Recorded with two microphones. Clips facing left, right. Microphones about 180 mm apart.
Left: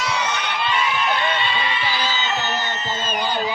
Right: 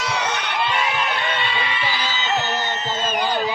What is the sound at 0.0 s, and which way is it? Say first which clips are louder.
Crowd: even; 60° right (ahead or behind).